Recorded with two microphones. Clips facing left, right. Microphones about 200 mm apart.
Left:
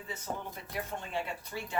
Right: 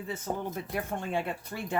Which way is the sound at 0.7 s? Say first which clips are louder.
Right 4 dB; 55° right (ahead or behind).